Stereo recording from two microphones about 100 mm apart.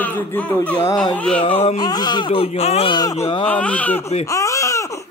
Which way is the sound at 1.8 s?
45° left (ahead or behind).